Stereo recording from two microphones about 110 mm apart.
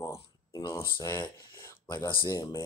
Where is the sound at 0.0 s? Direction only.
30° left (ahead or behind).